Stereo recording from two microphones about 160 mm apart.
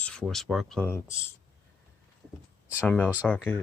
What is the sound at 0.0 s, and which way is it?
Speech, 5° left (ahead or behind).